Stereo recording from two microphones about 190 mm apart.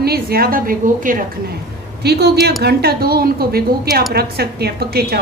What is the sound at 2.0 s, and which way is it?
A woman's voice, 60° right (ahead or behind).